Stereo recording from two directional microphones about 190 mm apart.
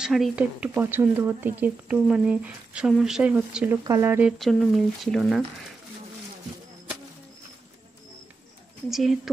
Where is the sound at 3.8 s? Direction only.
15° right (ahead or behind); by 5.4 s centre (ahead or behind).